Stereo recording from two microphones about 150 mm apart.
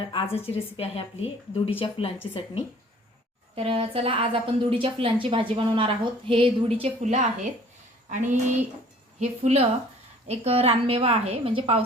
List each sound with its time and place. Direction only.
0.1 s a woman's voice: 40° left (ahead or behind)
3.5 s a woman's voice: 40° right (ahead or behind)